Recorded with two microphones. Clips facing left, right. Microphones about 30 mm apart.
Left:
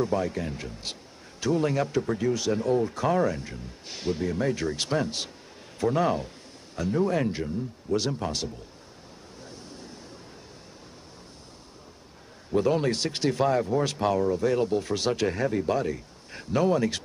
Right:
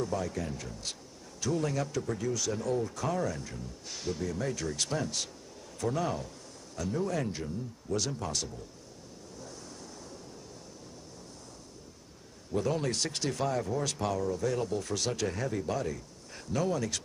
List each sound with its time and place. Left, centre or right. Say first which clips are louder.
0.0 s speech: left 6 dB; left
12.5 s speech: left 7 dB; left